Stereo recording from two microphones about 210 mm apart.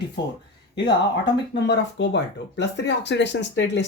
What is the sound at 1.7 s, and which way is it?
Speech, 55° left (ahead or behind).